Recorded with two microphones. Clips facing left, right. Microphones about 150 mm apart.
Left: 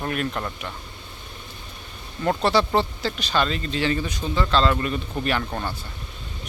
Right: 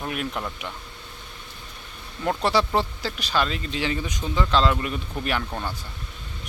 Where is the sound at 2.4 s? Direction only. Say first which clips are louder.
Left 2 dB; 10° right (ahead or behind).